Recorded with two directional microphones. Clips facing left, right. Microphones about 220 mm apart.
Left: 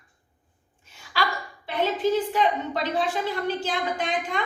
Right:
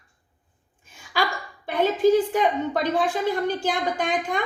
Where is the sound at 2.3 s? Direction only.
50° right (ahead or behind).